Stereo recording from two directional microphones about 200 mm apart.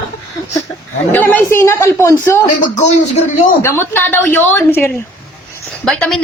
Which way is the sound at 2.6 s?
35° left (ahead or behind).